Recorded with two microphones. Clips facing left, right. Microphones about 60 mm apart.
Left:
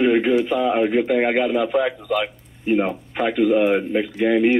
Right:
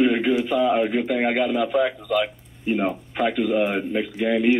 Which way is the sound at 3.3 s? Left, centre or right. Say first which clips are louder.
Left 8 dB; left.